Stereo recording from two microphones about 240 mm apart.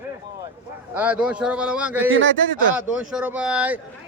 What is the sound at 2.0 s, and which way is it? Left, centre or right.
Speech, right.